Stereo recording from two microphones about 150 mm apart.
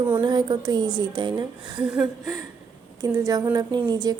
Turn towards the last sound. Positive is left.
turn(degrees=-25)  # may be behind; listen again after turning